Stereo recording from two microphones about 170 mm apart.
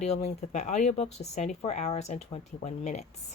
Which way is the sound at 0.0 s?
40° left (ahead or behind).